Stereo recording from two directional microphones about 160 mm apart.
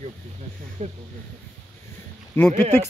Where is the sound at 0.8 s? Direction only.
50° right (ahead or behind).